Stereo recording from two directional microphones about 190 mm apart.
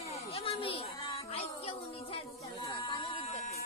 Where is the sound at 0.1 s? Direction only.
30° left (ahead or behind).